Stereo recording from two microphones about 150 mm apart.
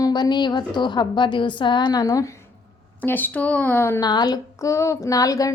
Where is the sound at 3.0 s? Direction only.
10° left (ahead or behind).